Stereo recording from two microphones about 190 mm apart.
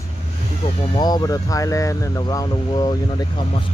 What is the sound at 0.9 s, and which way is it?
Speech, 20° left (ahead or behind).